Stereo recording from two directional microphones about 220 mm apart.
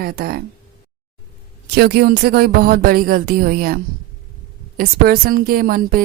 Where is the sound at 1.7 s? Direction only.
45° right (ahead or behind).